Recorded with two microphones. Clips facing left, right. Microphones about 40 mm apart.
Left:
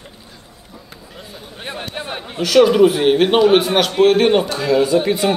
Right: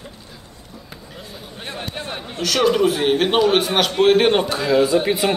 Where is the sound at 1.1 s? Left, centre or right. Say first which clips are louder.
Left 1 dB; centre.